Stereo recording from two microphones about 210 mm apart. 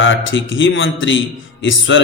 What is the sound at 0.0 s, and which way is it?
A man's voice, 65° left (ahead or behind).